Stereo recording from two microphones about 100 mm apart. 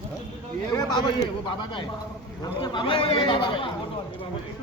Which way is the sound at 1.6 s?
55° left (ahead or behind).